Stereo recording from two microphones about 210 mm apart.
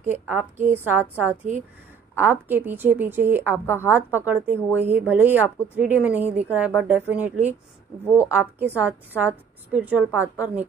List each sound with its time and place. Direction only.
0.1 s speech: 10° right (ahead or behind)